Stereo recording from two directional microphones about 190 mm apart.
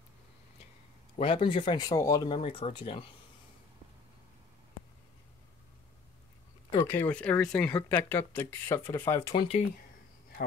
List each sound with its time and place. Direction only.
1.1 s speech: 30° left (ahead or behind)
6.7 s speech: 15° left (ahead or behind)